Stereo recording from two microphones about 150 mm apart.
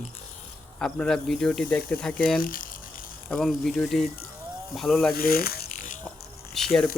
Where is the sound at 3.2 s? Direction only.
5° left (ahead or behind).